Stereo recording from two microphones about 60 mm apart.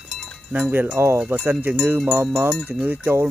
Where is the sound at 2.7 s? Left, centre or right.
Right.